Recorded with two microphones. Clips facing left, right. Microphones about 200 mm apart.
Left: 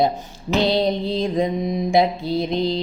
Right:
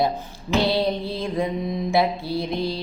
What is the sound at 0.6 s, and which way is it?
Mantra, 20° left (ahead or behind).